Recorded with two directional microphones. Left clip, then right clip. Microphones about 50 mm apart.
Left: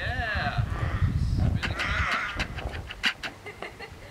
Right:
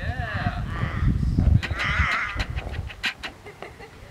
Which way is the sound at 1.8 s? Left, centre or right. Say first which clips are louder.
Right 4 dB; right.